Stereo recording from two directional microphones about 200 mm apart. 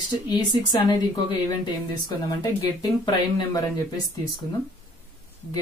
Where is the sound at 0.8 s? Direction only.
20° left (ahead or behind).